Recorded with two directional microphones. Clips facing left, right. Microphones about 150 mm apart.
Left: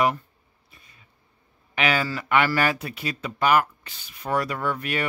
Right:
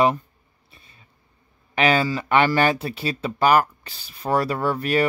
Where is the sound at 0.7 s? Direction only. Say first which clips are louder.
Right 2 dB; 30° right (ahead or behind).